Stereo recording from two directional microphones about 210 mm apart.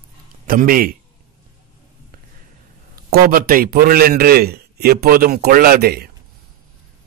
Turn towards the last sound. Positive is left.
turn(degrees=-50)  # may be behind; listen again after turning